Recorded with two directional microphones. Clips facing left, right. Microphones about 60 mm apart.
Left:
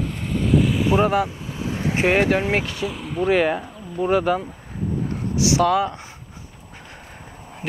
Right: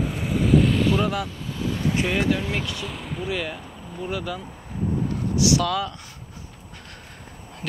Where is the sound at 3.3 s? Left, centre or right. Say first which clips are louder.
Left 13 dB; left.